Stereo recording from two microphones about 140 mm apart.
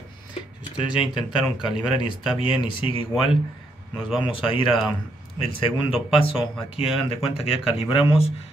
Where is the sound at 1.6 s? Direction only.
5° right (ahead or behind).